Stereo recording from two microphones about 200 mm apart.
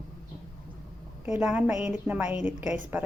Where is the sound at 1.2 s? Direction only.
5° right (ahead or behind).